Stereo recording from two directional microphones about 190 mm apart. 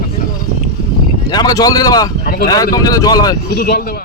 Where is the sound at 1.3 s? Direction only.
20° left (ahead or behind).